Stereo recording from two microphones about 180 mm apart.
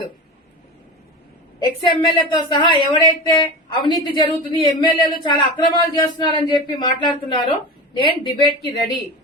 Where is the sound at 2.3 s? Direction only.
25° left (ahead or behind).